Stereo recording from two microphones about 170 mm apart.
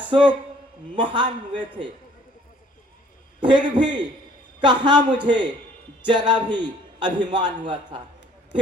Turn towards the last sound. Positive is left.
turn(degrees=-25)  # may be behind; listen again after turning